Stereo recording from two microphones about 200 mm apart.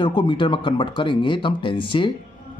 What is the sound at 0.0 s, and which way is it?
Speech, 25° left (ahead or behind).